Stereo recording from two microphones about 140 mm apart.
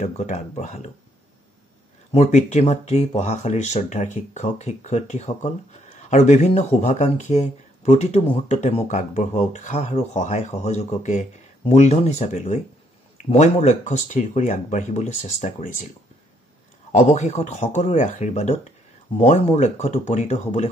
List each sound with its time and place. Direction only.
0.0 s speech: 55° left (ahead or behind)
2.1 s speech: 55° left (ahead or behind)
16.9 s speech: 55° left (ahead or behind)